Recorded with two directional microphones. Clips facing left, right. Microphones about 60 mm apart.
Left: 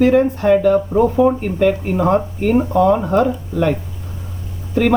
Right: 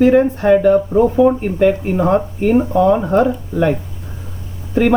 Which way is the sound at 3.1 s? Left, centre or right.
Centre.